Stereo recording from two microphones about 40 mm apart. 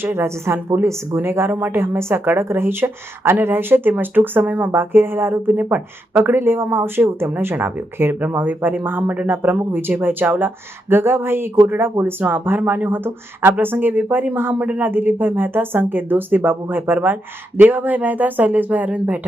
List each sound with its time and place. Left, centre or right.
0.0 s a woman's voice: right
2.2 s speech: right
3.4 s speech: right
4.7 s speech: right
5.7 s speech: right
6.3 s speech: right
7.5 s speech: right
8.2 s speech: right
9.0 s speech: right
10.0 s speech: right
12.2 s speech: right
13.7 s speech: right